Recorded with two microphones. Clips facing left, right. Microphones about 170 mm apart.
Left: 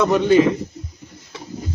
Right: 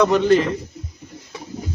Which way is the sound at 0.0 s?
Centre (ahead or behind).